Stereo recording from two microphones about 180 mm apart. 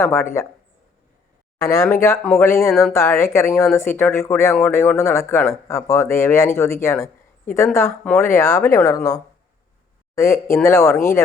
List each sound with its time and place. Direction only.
0.0 s speech: 15° left (ahead or behind)
1.5 s speech: 15° left (ahead or behind)
2.1 s speech: centre (ahead or behind)
2.4 s speech: 15° left (ahead or behind)